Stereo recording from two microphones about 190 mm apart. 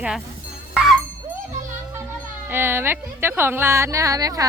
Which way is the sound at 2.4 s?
10° right (ahead or behind).